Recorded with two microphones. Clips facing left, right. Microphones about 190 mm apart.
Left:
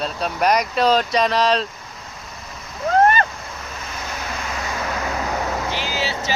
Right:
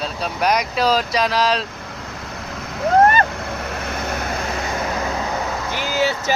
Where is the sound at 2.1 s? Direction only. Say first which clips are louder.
Right 6 dB; 80° right; by 4.2 s 60° right (ahead or behind).